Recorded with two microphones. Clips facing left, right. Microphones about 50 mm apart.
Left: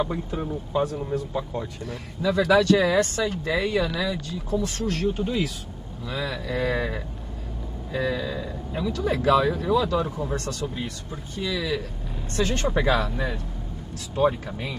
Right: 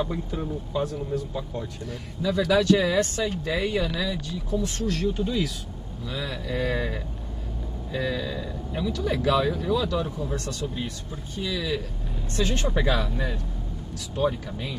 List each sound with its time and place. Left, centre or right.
0.0 s speech: left
1.9 s speech: left